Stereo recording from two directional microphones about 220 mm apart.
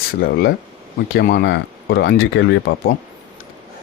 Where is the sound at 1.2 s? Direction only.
45° left (ahead or behind).